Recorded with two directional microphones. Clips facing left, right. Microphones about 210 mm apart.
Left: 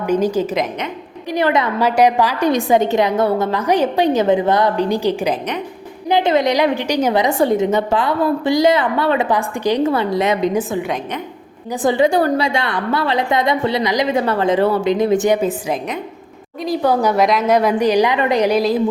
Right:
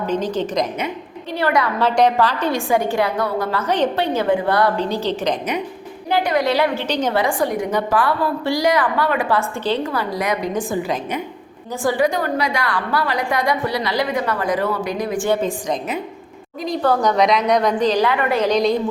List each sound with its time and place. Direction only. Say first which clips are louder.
0.0 s a woman's voice: left 4 dB; 10° left (ahead or behind)
1.3 s a woman's voice: left 3 dB; 20° left (ahead or behind)
6.1 s a woman's voice: left 3 dB; 20° left (ahead or behind)
10.5 s a woman's voice: left 2 dB; 5° left (ahead or behind)
11.8 s a woman's voice: left 4 dB; 25° left (ahead or behind); by 18.8 s 5° left (ahead or behind)